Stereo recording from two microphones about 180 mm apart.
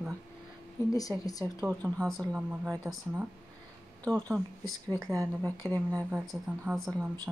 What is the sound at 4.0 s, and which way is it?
Speech, 5° left (ahead or behind).